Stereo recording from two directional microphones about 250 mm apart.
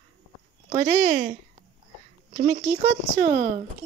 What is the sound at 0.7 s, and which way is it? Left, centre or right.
Speech, right.